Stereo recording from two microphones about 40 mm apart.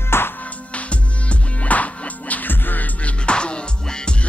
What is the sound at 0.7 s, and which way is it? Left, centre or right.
Music, left.